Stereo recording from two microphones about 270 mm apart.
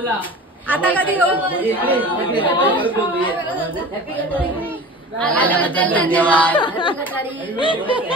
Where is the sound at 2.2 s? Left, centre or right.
Centre.